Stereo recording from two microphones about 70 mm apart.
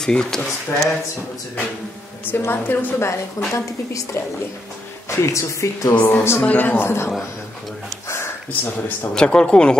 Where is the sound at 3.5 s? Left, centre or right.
Left.